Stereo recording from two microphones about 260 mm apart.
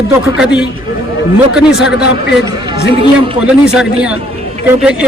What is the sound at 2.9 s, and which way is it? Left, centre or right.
Speech, right.